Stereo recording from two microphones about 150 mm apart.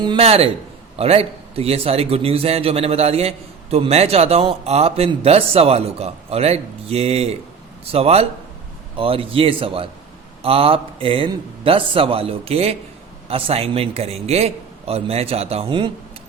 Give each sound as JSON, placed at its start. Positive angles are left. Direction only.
{"t": 0.2, "sound": "a man's voice", "side_deg": -40}